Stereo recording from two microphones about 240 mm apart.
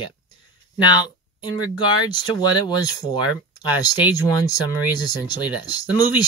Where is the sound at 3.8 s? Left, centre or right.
Centre.